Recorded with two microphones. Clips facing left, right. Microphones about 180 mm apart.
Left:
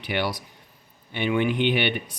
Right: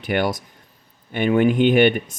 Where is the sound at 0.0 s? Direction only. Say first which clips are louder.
Right 6 dB; 50° right (ahead or behind).